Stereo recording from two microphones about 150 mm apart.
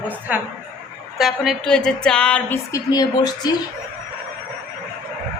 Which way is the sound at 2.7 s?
25° left (ahead or behind).